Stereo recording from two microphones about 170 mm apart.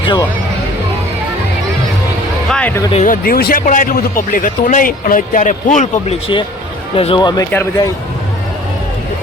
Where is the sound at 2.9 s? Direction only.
50° left (ahead or behind); by 7.4 s 25° left (ahead or behind).